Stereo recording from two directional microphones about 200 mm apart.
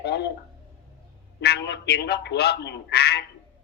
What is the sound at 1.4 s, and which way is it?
Speech, 55° left (ahead or behind).